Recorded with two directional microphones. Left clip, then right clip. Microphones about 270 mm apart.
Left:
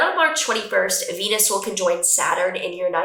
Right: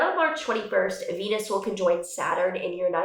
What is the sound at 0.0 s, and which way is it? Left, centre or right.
Speech, centre.